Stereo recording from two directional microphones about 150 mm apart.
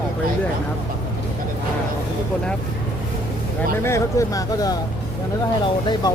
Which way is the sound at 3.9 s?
20° left (ahead or behind).